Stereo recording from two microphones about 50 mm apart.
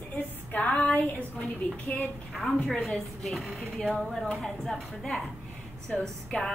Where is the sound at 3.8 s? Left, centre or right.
Centre.